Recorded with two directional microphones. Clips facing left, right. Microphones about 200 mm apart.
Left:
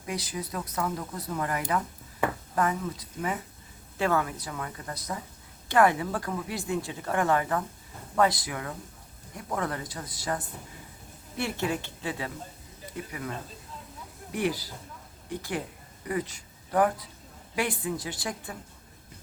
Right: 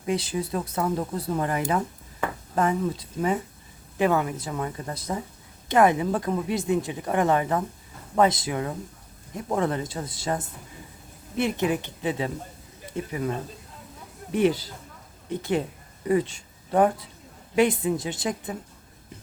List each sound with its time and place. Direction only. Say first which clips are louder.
0.0 s speech: right 7 dB; 25° right (ahead or behind)
3.9 s speech: right 4 dB; 15° right (ahead or behind)
14.3 s speech: right 7 dB; 25° right (ahead or behind)